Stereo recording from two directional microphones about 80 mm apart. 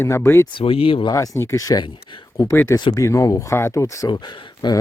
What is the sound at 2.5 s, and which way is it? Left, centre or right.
Speech, left.